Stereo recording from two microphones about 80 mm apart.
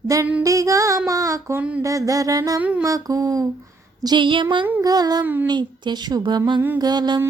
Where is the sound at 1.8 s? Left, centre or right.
Right.